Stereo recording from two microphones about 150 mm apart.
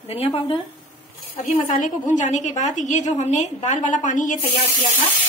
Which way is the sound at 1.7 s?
60° left (ahead or behind).